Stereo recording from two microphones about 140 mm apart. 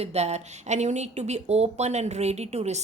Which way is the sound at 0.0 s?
50° right (ahead or behind).